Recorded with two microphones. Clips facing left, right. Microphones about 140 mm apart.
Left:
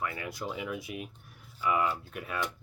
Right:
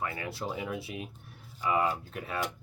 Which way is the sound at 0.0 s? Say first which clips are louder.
Right 1 dB; 30° right (ahead or behind).